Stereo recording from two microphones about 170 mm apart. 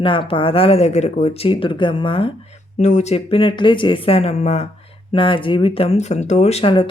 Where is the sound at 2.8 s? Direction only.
45° left (ahead or behind).